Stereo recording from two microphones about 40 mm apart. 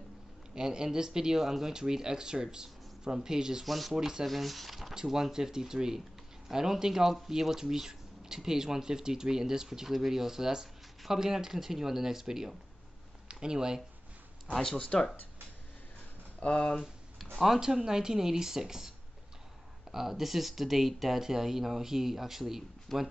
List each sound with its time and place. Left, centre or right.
0.6 s speech: centre
3.6 s speech: centre
3.9 s speech: centre
4.3 s speech: centre
4.9 s speech: centre
14.5 s speech: centre
16.3 s speech: left
17.6 s speech: centre
22.9 s speech: centre